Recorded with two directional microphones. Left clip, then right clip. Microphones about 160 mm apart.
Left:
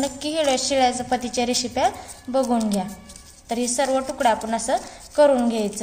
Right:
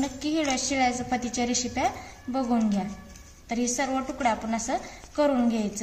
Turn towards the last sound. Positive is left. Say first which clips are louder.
# left 8 dB
turn(degrees=45)  # may be behind; listen again after turning